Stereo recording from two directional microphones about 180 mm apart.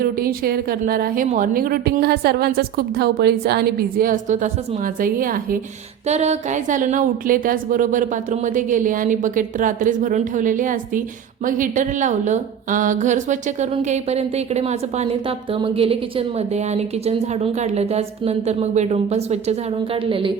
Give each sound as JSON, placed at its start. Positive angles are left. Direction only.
{"t": 0.0, "sound": "a woman's voice", "side_deg": -55}
{"t": 6.1, "sound": "a woman's voice", "side_deg": -40}